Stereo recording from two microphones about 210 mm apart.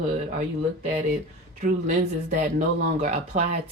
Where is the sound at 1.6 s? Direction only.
35° right (ahead or behind).